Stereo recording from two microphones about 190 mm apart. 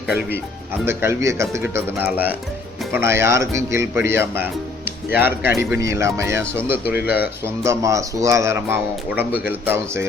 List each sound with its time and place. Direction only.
0.9 s speech: 15° right (ahead or behind)
6.8 s a man's voice: 55° left (ahead or behind)
7.2 s speech: 15° right (ahead or behind)